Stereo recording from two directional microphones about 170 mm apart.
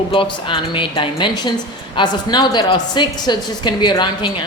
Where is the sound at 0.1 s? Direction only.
30° left (ahead or behind).